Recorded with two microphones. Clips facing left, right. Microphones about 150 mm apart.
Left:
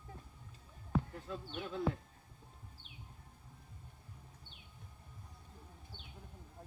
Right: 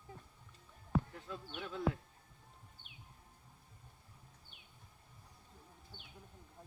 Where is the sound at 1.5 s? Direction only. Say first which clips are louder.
Left 2 dB; 30° left (ahead or behind).